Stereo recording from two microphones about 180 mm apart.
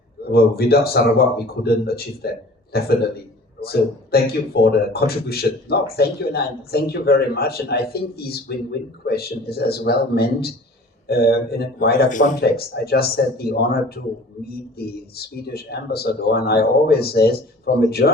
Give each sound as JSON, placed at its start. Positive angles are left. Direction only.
{"t": 0.3, "sound": "speech", "side_deg": 60}
{"t": 12.4, "sound": "speech", "side_deg": 60}